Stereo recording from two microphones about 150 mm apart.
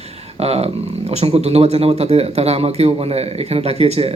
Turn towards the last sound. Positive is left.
turn(degrees=-40)  # may be behind; listen again after turning